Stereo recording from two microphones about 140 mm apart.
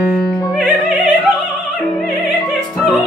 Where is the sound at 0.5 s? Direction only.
Centre (ahead or behind).